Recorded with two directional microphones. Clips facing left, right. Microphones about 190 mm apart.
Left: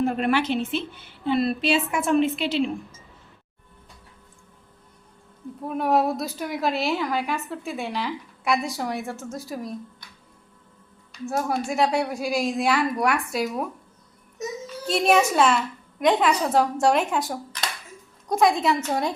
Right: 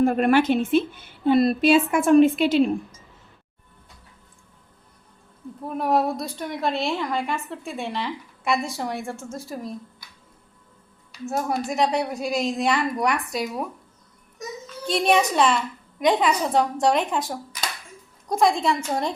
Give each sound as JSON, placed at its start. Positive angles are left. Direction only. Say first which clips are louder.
{"t": 0.0, "sound": "a woman's voice", "louder": "right 4 dB", "side_deg": -50}
{"t": 5.6, "sound": "a woman's voice", "louder": "even", "side_deg": 0}
{"t": 11.1, "sound": "a woman's voice", "louder": "even", "side_deg": 0}
{"t": 14.8, "sound": "a woman's voice", "louder": "even", "side_deg": 0}